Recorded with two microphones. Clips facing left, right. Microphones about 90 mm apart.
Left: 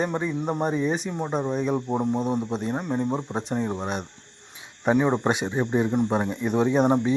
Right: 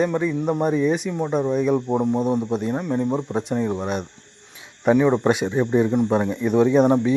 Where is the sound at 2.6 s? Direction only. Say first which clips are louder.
Right 3 dB; 25° left (ahead or behind).